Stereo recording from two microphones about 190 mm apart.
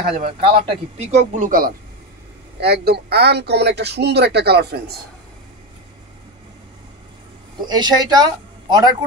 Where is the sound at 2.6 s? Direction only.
55° right (ahead or behind).